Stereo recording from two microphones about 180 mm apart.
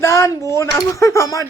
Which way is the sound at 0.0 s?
15° left (ahead or behind).